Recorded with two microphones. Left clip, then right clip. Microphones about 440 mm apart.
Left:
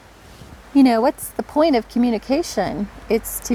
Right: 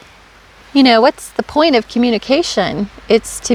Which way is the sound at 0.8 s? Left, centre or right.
Right.